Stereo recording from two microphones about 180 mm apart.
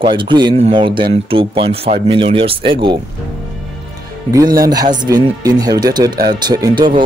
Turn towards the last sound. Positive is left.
turn(degrees=-25)  # may be behind; listen again after turning